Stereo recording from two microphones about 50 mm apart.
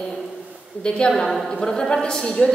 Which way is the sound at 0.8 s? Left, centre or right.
Centre.